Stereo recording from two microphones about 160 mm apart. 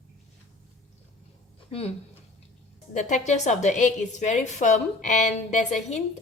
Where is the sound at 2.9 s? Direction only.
50° left (ahead or behind).